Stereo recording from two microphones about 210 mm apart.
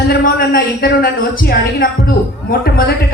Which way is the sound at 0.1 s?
45° left (ahead or behind).